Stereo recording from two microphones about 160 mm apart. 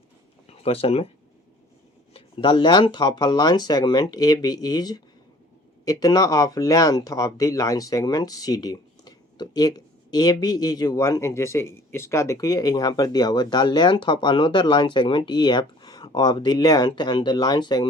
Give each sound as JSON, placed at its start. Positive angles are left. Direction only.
{"t": 0.4, "sound": "speech", "side_deg": 40}
{"t": 2.1, "sound": "speech", "side_deg": 35}